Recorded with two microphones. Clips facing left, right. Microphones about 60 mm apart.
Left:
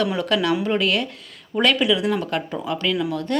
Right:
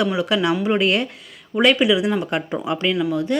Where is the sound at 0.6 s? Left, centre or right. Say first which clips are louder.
Right 2 dB; centre.